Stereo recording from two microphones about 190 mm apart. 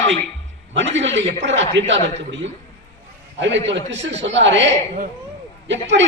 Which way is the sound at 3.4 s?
70° right (ahead or behind).